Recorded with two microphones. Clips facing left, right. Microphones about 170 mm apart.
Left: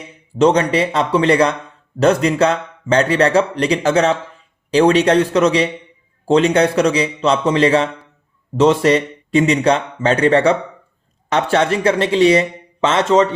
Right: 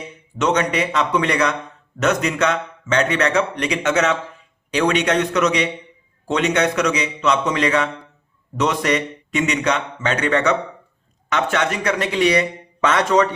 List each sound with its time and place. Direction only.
0.3 s a man's voice: 30° left (ahead or behind)